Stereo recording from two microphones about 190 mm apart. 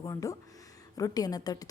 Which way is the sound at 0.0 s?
15° left (ahead or behind).